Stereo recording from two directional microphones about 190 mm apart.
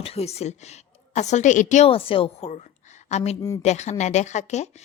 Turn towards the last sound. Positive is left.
turn(degrees=35)  # may be behind; listen again after turning